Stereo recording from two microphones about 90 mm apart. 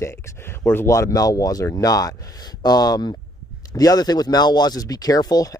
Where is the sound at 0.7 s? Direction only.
30° left (ahead or behind).